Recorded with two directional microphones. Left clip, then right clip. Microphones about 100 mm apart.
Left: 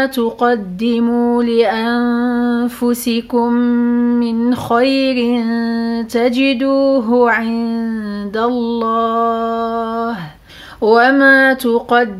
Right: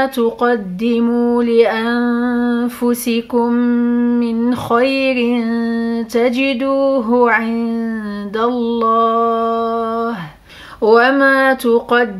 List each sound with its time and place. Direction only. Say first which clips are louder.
0.0 s speech: even; 25° left (ahead or behind)